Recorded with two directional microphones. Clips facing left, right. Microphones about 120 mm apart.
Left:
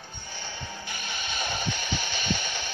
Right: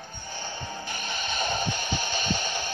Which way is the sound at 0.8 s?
40° right (ahead or behind).